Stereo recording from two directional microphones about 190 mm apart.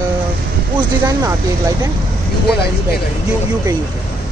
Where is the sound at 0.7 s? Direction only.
20° right (ahead or behind).